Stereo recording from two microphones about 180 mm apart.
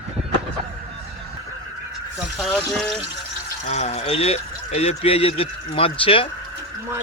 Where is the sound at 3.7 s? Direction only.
40° left (ahead or behind).